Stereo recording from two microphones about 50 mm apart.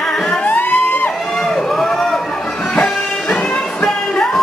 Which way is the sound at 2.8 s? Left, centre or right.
Left.